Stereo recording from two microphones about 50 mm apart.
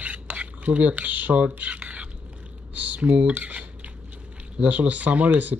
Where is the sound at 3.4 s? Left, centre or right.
Right.